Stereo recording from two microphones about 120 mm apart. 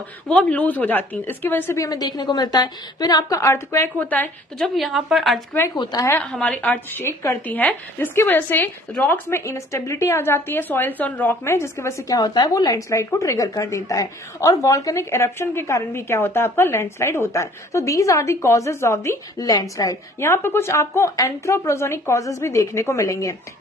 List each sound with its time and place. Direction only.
0.3 s a woman's voice: 10° left (ahead or behind)
1.8 s a woman's voice: 35° left (ahead or behind); by 4.3 s 15° left (ahead or behind)
4.6 s a woman's voice: centre (ahead or behind)
5.8 s a woman's voice: 35° left (ahead or behind)
6.3 s a woman's voice: 5° left (ahead or behind); by 23.3 s 25° left (ahead or behind)